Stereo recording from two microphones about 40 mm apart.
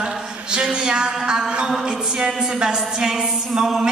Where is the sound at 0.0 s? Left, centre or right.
Right.